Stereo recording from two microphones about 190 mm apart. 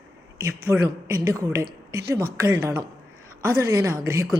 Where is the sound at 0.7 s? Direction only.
15° right (ahead or behind).